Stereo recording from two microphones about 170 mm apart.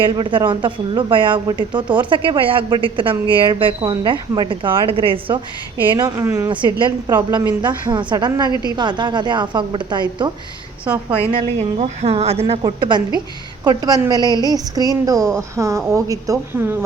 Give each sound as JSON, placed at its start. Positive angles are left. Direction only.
{"t": 0.0, "sound": "speech", "side_deg": -30}
{"t": 6.1, "sound": "speech", "side_deg": -15}
{"t": 6.5, "sound": "speech", "side_deg": -30}
{"t": 11.3, "sound": "a woman's voice", "side_deg": -40}
{"t": 15.2, "sound": "speech", "side_deg": 5}
{"t": 15.5, "sound": "speech", "side_deg": -20}